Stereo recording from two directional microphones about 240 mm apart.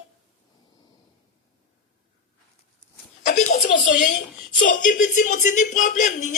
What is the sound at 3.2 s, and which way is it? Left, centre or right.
Speech, left.